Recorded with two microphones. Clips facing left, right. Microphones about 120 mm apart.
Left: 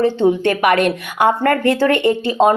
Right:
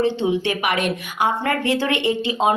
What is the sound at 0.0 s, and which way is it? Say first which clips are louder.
Speech: left 5 dB; 50° left (ahead or behind).